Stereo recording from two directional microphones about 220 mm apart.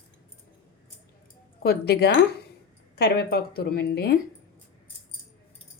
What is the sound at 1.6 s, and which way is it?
A woman's voice, 50° left (ahead or behind).